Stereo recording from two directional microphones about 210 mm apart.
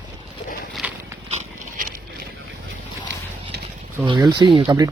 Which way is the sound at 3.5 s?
50° right (ahead or behind).